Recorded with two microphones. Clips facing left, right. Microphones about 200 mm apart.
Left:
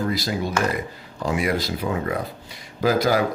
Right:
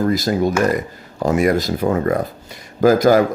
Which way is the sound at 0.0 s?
45° right (ahead or behind).